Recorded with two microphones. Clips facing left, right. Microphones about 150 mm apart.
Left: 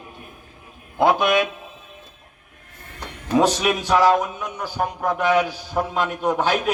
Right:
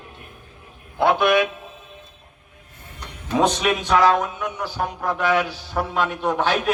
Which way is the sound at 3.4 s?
5° left (ahead or behind).